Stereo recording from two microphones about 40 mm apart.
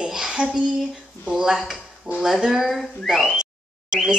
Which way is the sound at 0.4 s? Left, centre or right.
Right.